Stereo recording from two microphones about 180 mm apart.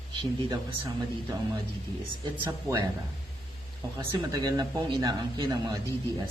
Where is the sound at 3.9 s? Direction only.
20° right (ahead or behind).